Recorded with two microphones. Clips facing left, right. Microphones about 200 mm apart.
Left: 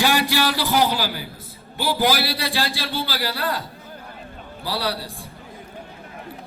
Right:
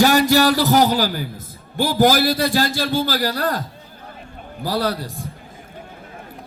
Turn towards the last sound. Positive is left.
turn(degrees=-45)  # may be behind; listen again after turning